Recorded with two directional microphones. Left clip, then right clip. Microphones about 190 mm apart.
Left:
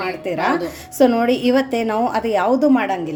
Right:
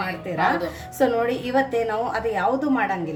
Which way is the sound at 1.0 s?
40° left (ahead or behind).